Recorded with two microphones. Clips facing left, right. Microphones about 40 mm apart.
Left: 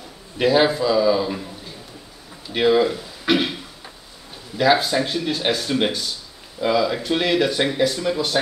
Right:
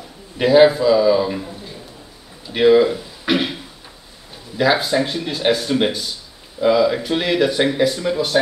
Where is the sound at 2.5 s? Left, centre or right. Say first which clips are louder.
Right 4 dB; centre.